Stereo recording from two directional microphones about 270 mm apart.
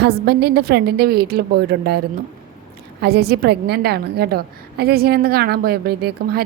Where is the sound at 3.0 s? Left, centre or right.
Right.